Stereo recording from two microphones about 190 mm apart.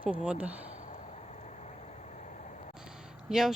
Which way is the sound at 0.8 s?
40° left (ahead or behind).